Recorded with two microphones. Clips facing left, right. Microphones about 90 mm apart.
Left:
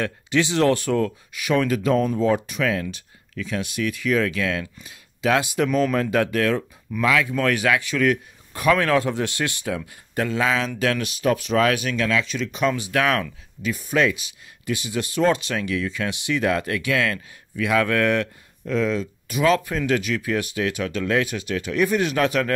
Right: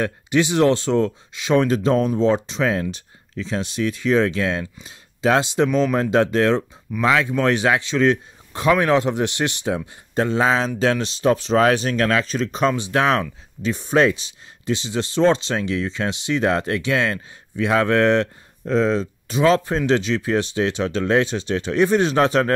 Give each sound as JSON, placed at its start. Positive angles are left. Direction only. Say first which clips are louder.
{"t": 0.0, "sound": "speech", "louder": "right 3 dB", "side_deg": -20}